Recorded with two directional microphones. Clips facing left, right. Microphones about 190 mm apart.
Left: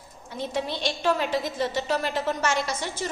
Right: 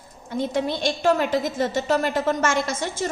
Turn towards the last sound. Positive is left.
turn(degrees=-50)  # may be behind; listen again after turning